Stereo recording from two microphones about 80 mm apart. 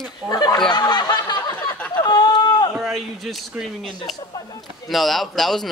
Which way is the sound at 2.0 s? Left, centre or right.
Left.